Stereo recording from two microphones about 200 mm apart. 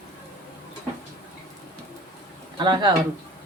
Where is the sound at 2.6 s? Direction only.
20° right (ahead or behind).